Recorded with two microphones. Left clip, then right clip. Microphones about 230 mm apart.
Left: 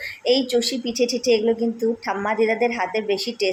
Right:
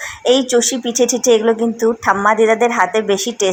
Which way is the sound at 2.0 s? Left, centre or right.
Centre.